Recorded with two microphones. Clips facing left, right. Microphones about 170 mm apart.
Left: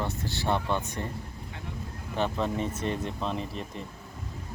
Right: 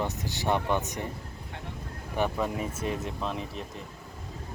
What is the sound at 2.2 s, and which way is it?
Speech, 10° right (ahead or behind).